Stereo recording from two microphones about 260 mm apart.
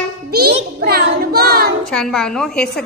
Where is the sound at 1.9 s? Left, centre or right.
Centre.